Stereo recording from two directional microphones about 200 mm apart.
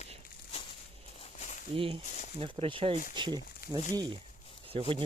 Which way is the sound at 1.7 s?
25° right (ahead or behind).